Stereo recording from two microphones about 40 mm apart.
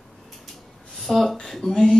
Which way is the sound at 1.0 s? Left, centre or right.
Centre.